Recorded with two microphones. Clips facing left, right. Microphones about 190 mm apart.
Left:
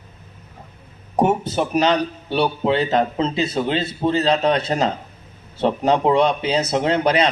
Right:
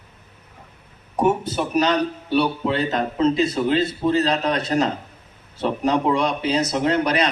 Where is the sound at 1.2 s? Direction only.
30° left (ahead or behind).